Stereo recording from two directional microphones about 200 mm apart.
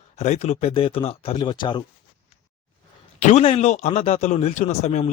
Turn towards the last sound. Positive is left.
turn(degrees=35)  # may be behind; listen again after turning